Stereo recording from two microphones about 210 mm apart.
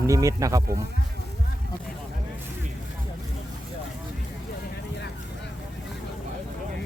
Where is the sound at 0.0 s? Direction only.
15° right (ahead or behind).